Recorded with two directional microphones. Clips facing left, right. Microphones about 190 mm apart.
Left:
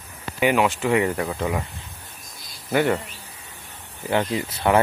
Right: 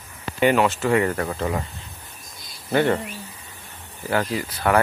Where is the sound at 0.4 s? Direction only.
10° left (ahead or behind).